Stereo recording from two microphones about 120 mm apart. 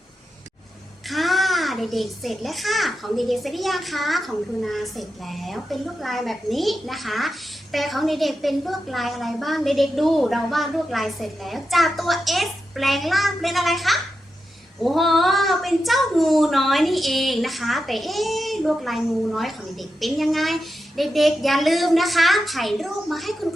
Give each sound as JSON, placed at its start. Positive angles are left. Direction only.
{"t": 1.0, "sound": "a child's voice", "side_deg": 0}